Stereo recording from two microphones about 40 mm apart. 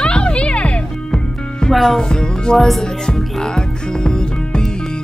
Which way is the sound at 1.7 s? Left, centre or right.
Centre.